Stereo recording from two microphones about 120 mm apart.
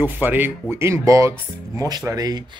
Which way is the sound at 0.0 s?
15° right (ahead or behind).